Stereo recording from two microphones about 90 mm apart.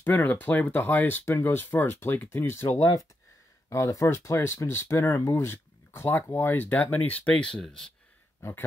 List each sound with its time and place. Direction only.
0.0 s speech: 20° left (ahead or behind)
8.4 s speech: 30° left (ahead or behind)